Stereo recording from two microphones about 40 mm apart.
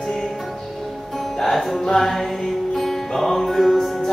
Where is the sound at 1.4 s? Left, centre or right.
Centre.